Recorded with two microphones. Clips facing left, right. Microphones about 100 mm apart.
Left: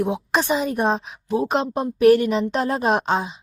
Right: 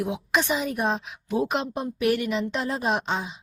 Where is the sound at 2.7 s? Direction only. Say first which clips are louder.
Left 6 dB; 55° left (ahead or behind).